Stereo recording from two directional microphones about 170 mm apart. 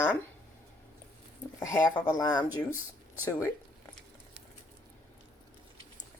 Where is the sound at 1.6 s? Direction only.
20° left (ahead or behind).